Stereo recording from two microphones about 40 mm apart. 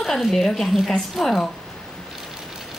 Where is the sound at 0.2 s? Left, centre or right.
Centre.